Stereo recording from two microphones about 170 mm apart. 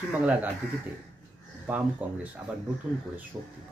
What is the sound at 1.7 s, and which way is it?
Speech, 10° right (ahead or behind).